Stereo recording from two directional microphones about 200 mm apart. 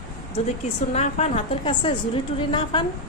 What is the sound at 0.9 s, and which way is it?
A woman's voice, 35° left (ahead or behind).